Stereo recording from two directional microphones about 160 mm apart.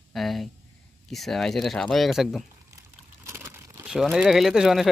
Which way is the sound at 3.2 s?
15° right (ahead or behind).